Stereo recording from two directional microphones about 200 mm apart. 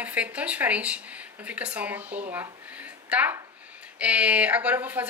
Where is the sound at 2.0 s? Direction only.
40° right (ahead or behind).